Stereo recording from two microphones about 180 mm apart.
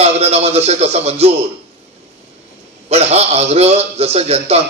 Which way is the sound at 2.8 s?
35° right (ahead or behind).